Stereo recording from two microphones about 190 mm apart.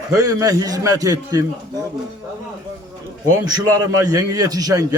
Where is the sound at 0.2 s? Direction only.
20° right (ahead or behind).